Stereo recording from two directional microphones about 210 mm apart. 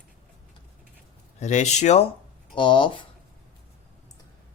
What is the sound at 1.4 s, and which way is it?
Speech, 35° left (ahead or behind).